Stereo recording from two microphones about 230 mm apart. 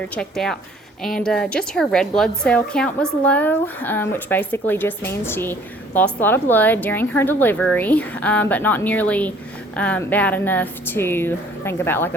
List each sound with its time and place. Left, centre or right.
0.1 s a woman's voice: centre